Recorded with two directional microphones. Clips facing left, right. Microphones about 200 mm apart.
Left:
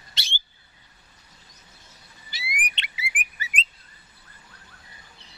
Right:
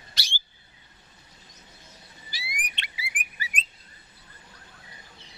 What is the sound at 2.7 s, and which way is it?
Bird, 25° left (ahead or behind).